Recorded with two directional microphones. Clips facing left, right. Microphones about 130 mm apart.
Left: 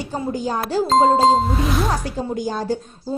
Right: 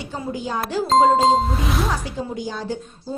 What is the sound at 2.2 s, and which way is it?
Speech, 45° left (ahead or behind).